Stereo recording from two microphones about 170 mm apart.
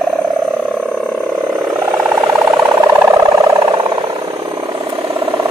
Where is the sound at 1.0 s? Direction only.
5° left (ahead or behind); by 2.5 s 15° right (ahead or behind).